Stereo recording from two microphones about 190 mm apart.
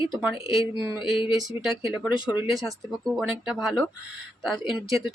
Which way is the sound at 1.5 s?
Centre (ahead or behind).